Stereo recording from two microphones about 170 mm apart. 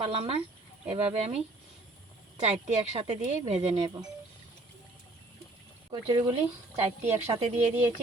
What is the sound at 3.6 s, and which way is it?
Speech, 25° right (ahead or behind).